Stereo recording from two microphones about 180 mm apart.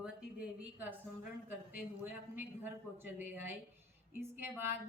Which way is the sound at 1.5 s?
10° right (ahead or behind).